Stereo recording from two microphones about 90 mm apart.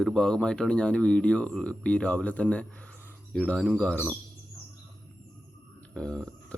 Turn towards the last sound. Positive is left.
turn(degrees=10)  # may be behind; listen again after turning